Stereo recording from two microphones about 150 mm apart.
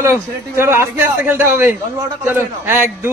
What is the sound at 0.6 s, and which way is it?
A man's voice, 15° right (ahead or behind).